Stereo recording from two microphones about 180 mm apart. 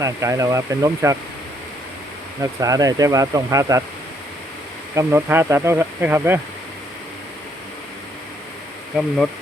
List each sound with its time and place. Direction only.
0.0 s speech: 15° right (ahead or behind)
2.4 s speech: 20° right (ahead or behind)
4.9 s speech: 10° right (ahead or behind)
9.0 s speech: 5° left (ahead or behind)